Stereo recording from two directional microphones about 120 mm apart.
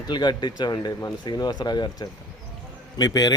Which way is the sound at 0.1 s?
35° left (ahead or behind).